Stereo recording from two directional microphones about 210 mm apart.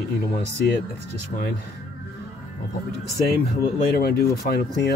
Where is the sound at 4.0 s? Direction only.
45° left (ahead or behind).